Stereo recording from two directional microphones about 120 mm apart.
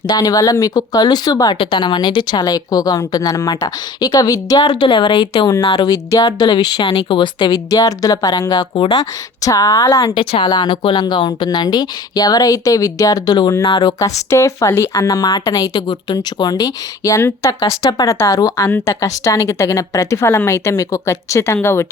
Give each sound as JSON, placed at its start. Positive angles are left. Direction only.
{"t": 0.1, "sound": "a woman's voice", "side_deg": 30}
{"t": 10.2, "sound": "a woman's voice", "side_deg": 45}
{"t": 14.3, "sound": "a woman's voice", "side_deg": 25}